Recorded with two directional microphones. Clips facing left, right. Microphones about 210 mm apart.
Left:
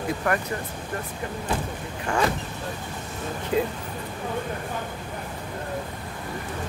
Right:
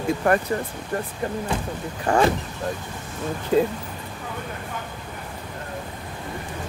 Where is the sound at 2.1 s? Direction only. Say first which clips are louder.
Right 6 dB; 35° right (ahead or behind).